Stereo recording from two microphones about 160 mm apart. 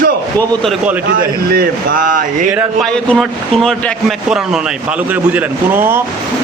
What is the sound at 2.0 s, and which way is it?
Speech, 55° right (ahead or behind).